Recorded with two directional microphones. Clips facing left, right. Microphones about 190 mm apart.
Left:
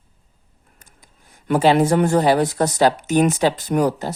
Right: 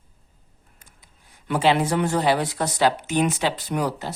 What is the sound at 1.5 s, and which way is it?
A woman's voice, 45° left (ahead or behind).